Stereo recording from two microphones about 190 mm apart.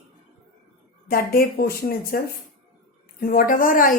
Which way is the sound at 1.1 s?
50° left (ahead or behind).